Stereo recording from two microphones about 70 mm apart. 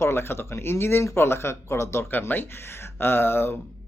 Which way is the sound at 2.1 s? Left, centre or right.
Left.